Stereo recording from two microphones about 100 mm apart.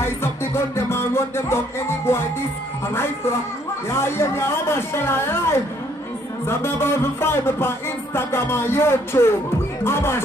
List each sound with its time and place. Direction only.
0.0 s music: 25° left (ahead or behind)
2.9 s speech: 25° left (ahead or behind)